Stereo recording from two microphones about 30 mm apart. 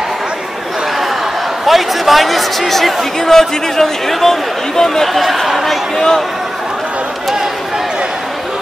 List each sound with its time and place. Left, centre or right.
1.7 s speech: centre
3.2 s a man's voice: centre
5.0 s speech: centre
5.9 s a man's voice: centre